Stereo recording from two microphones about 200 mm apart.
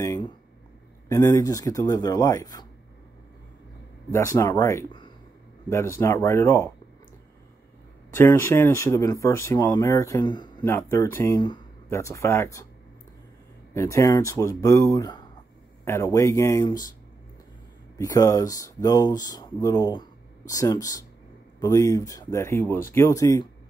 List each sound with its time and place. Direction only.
0.0 s a sound: 15° left (ahead or behind)
1.0 s speech: 15° left (ahead or behind)
4.1 s speech: 15° left (ahead or behind)
8.2 s speech: 10° left (ahead or behind)
13.7 s speech: 15° left (ahead or behind)
17.9 s speech: 15° left (ahead or behind)